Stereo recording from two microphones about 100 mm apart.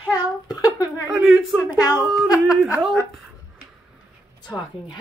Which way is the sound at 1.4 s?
Centre (ahead or behind).